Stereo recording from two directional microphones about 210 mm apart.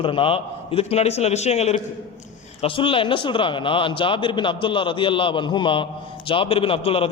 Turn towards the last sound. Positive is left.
turn(degrees=25)  # may be behind; listen again after turning